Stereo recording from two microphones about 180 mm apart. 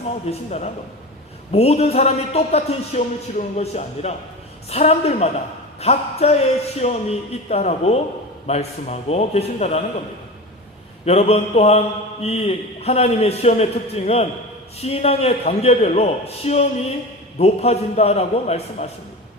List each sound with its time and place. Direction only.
0.3 s a man's voice: 40° left (ahead or behind)
11.0 s a man's voice: 35° left (ahead or behind)